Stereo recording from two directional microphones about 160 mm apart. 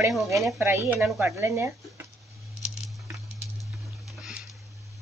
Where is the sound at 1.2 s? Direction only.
20° right (ahead or behind).